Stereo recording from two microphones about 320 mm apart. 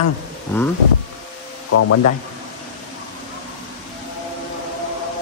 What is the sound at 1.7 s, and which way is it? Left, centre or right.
Speech, left.